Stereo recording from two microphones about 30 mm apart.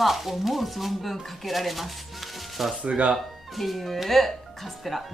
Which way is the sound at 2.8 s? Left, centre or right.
Right.